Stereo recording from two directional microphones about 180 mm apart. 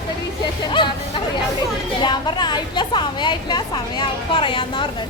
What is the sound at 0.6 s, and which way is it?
Speech, 25° left (ahead or behind).